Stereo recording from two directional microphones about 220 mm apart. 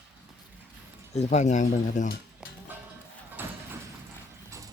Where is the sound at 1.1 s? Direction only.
30° left (ahead or behind).